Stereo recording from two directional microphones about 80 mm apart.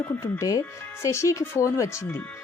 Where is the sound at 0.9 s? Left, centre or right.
Left.